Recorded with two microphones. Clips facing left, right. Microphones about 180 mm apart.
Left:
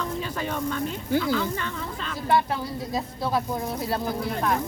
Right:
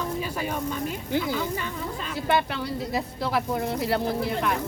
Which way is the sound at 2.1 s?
75° right (ahead or behind).